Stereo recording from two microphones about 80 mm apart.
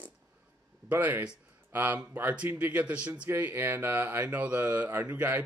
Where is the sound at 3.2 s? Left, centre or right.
Right.